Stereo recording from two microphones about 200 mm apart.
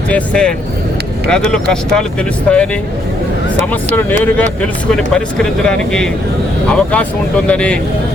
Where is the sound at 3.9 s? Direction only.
10° left (ahead or behind).